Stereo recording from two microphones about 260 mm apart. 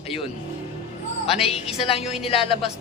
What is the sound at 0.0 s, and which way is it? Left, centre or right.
Speech, left.